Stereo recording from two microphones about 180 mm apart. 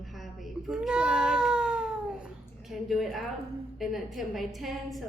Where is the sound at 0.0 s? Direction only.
Centre (ahead or behind).